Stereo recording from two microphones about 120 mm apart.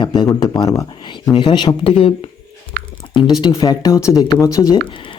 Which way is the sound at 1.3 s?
45° left (ahead or behind).